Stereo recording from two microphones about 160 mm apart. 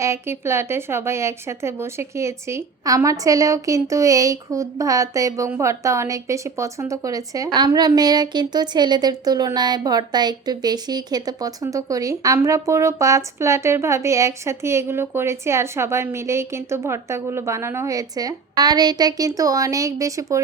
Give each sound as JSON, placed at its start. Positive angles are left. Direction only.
{"t": 0.0, "sound": "speech", "side_deg": -15}